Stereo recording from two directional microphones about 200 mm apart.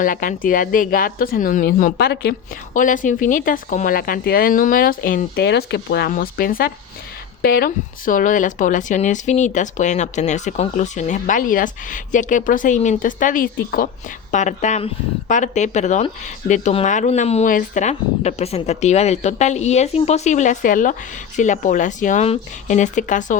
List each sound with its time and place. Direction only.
0.0 s speech: 40° left (ahead or behind)